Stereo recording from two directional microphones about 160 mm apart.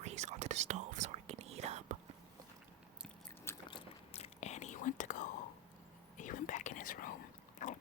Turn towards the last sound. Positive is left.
turn(degrees=50)  # may be behind; listen again after turning